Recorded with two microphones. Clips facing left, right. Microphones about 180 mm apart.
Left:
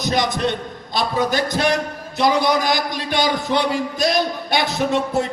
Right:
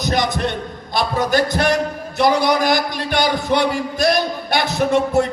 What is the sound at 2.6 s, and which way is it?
A man's voice, 55° right (ahead or behind).